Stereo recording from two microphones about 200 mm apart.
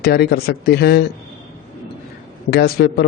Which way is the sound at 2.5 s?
50° left (ahead or behind).